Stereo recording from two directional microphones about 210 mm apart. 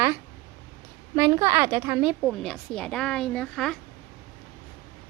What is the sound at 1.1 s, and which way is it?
A woman's voice, 15° right (ahead or behind).